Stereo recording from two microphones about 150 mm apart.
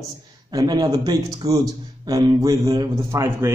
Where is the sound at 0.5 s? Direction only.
25° right (ahead or behind).